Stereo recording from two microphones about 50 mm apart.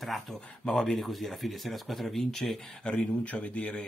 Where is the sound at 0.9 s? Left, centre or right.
Centre.